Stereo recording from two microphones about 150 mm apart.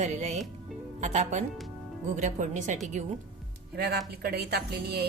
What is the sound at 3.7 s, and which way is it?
Speech, 90° right.